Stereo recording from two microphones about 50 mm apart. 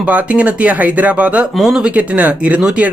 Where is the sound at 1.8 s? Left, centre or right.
Right.